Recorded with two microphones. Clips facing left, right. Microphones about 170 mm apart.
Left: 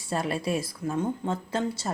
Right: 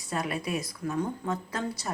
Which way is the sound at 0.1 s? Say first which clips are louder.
Left 3 dB; 30° left (ahead or behind).